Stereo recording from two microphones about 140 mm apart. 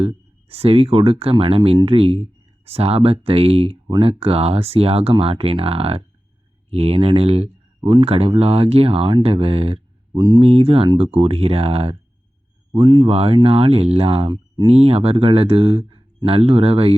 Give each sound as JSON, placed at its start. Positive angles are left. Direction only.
{"t": 0.0, "sound": "speech", "side_deg": -45}
{"t": 3.8, "sound": "speech", "side_deg": -35}
{"t": 7.8, "sound": "speech", "side_deg": -30}
{"t": 8.0, "sound": "speech", "side_deg": -45}
{"t": 10.5, "sound": "speech", "side_deg": -40}
{"t": 12.7, "sound": "speech", "side_deg": -30}
{"t": 13.1, "sound": "speech", "side_deg": -45}
{"t": 14.3, "sound": "speech", "side_deg": -30}
{"t": 14.7, "sound": "speech", "side_deg": -45}